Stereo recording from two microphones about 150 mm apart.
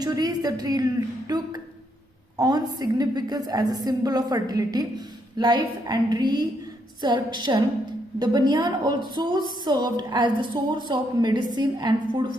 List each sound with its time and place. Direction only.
0.0 s a woman's voice: 25° right (ahead or behind)